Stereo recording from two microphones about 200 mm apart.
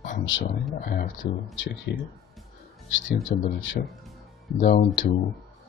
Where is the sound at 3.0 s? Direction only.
70° left (ahead or behind).